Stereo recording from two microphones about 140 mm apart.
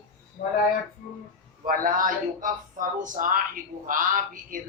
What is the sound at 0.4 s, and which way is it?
Speech, 60° left (ahead or behind).